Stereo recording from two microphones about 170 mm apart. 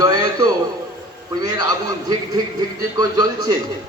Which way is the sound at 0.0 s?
20° right (ahead or behind).